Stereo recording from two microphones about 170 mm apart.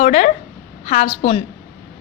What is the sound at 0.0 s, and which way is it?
A woman's voice, 45° left (ahead or behind).